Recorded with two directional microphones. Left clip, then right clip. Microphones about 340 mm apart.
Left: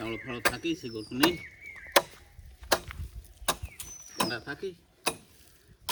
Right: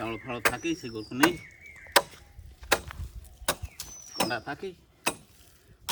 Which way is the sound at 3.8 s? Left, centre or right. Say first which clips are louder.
Right 2 dB; centre.